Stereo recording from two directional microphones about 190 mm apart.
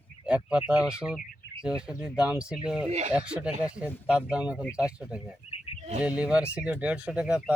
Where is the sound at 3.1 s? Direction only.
5° right (ahead or behind).